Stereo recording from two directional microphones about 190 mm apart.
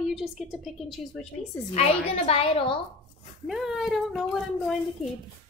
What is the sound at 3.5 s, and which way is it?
A woman's voice, 5° right (ahead or behind).